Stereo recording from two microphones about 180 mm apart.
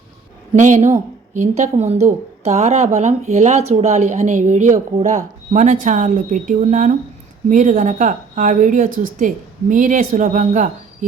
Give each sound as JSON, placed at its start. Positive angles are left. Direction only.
{"t": 0.5, "sound": "speech", "side_deg": -40}